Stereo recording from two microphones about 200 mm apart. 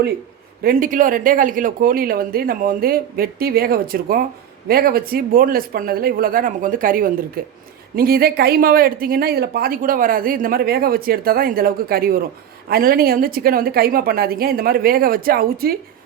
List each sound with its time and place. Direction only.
0.6 s speech: 45° right (ahead or behind)